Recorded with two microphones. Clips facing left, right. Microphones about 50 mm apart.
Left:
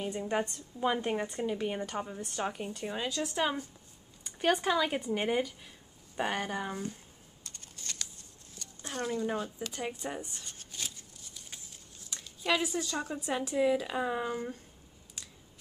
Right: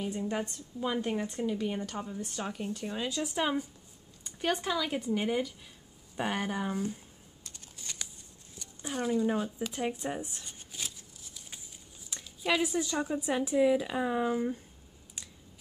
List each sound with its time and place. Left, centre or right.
0.0 s a woman's voice: centre
3.1 s speech: centre
4.2 s a woman's voice: centre
6.1 s speech: centre
7.4 s typing: centre
8.5 s speech: centre